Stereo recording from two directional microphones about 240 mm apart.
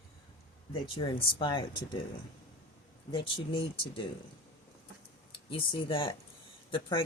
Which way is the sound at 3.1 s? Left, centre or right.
Centre.